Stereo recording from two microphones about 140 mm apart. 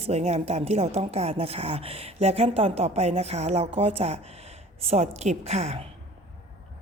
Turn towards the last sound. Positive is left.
turn(degrees=-50)  # may be behind; listen again after turning